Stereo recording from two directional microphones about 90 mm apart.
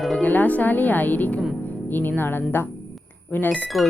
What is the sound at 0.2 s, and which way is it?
A woman's voice, 20° left (ahead or behind).